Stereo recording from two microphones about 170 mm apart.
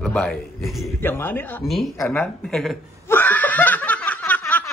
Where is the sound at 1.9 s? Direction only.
15° left (ahead or behind).